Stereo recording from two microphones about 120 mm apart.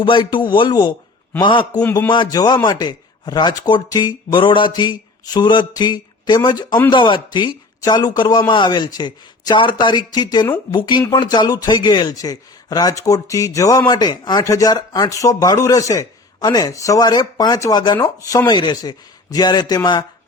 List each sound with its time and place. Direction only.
0.0 s speech: 40° left (ahead or behind)
1.8 s a man's voice: 15° left (ahead or behind)
2.0 s speech: 40° left (ahead or behind)